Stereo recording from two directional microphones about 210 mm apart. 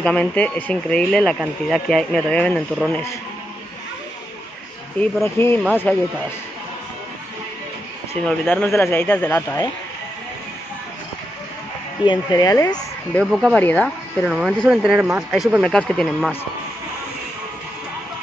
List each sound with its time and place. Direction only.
0.0 s speech: 5° left (ahead or behind)
4.9 s a man's voice: 10° left (ahead or behind)
8.3 s a man's voice: 5° left (ahead or behind)
12.0 s speech: 20° left (ahead or behind)
13.1 s speech: centre (ahead or behind)